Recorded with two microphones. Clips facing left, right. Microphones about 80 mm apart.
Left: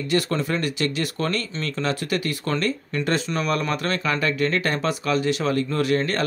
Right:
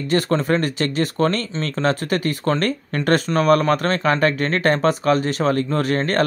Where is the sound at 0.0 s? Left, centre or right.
Right.